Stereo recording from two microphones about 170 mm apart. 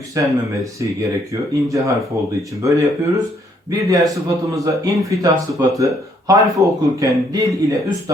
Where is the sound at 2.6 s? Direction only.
20° right (ahead or behind).